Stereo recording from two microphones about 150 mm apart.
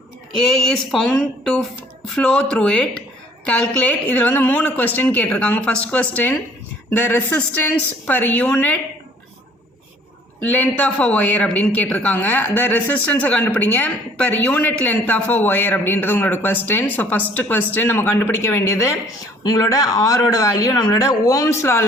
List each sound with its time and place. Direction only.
0.3 s speech: 5° left (ahead or behind)
10.4 s speech: 10° left (ahead or behind)